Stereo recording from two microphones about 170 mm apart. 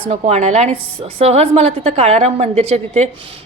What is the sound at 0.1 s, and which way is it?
A woman's voice, 40° right (ahead or behind).